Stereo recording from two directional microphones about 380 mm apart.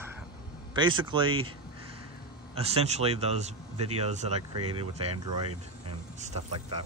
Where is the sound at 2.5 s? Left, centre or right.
Centre.